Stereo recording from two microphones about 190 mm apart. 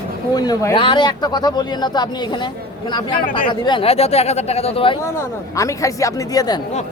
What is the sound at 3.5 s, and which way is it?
Speech, 25° left (ahead or behind).